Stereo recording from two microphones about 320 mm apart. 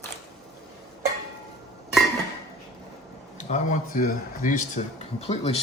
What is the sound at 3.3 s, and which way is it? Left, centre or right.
Speech, left.